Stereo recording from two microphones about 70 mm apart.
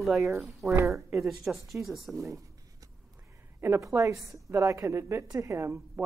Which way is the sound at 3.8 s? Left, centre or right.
Right.